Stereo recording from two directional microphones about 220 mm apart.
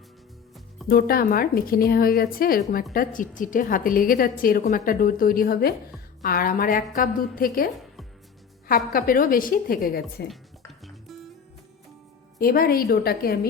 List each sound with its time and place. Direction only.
0.9 s a woman's voice: 45° left (ahead or behind)
8.9 s a woman's voice: 40° left (ahead or behind)
10.7 s music: centre (ahead or behind)
12.4 s speech: 40° left (ahead or behind)